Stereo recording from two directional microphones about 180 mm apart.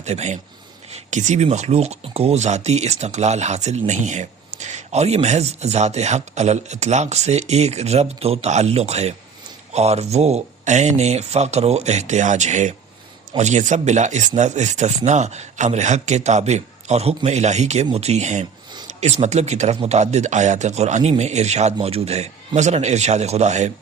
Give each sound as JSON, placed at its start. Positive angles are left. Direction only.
{"t": 0.0, "sound": "speech", "side_deg": -40}